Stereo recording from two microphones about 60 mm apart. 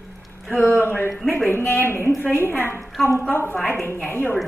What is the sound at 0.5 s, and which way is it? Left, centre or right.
Speech, left.